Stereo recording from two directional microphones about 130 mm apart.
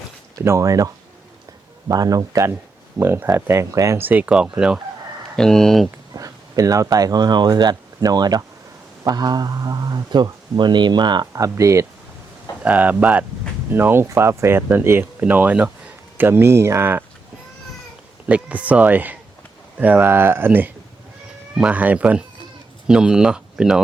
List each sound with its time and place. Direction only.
0.3 s speech: 25° right (ahead or behind)
1.9 s speech: 30° right (ahead or behind); by 4.8 s 5° right (ahead or behind)
5.4 s speech: 5° left (ahead or behind)
6.1 s speech: 25° right (ahead or behind)
12.6 s speech: 10° right (ahead or behind)
18.3 s speech: 10° right (ahead or behind)